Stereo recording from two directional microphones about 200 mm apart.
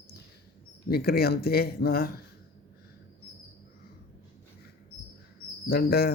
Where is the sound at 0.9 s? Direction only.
50° left (ahead or behind).